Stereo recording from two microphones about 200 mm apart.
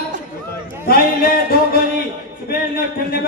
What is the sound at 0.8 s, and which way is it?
Speech, 50° left (ahead or behind).